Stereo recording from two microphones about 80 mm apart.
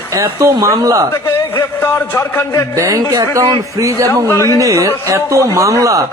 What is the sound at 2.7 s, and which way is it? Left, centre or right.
Speech, right.